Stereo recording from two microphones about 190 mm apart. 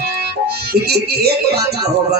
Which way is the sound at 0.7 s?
55° right (ahead or behind).